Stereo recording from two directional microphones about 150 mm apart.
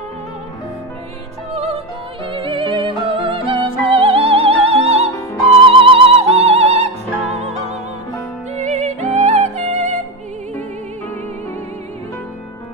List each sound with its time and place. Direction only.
1.5 s music: 40° right (ahead or behind)
8.5 s music: 50° right (ahead or behind)